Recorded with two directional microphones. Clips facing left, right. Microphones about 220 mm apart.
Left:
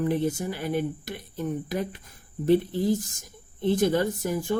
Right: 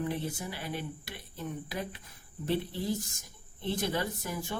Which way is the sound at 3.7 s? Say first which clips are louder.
Left 9 dB; 45° left (ahead or behind).